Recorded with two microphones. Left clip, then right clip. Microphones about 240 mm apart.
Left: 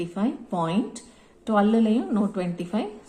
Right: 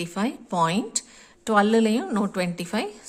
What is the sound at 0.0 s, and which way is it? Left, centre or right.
A woman's voice, right.